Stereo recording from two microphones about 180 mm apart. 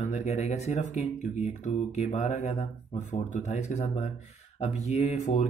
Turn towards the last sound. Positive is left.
turn(degrees=35)  # may be behind; listen again after turning